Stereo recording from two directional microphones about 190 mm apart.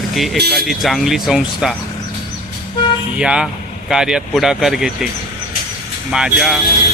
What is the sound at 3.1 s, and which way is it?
Speech, 5° right (ahead or behind).